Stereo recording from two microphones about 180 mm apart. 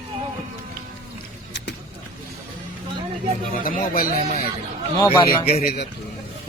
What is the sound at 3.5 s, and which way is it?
Speech, 50° left (ahead or behind).